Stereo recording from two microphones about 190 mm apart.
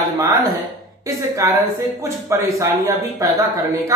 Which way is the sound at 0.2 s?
20° right (ahead or behind).